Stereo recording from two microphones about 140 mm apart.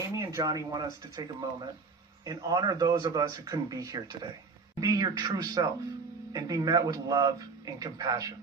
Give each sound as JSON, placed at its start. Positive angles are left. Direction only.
{"t": 0.1, "sound": "speech", "side_deg": -20}